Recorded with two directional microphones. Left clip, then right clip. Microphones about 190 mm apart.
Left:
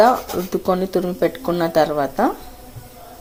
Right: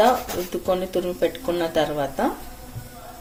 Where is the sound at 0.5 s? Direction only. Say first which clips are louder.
Left 4 dB; 30° left (ahead or behind).